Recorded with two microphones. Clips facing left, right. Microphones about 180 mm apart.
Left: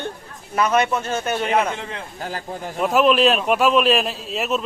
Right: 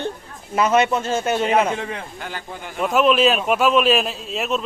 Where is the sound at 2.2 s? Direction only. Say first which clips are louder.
Left 3 dB; 35° left (ahead or behind).